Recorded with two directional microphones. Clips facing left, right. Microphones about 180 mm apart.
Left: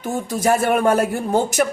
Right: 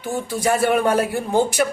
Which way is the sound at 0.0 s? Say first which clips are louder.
Left 2 dB; 45° left (ahead or behind).